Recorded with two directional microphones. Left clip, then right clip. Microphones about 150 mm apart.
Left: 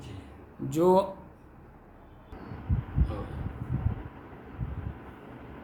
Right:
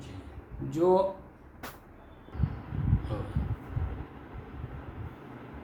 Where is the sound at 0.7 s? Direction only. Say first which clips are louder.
Left 1 dB; 55° left (ahead or behind).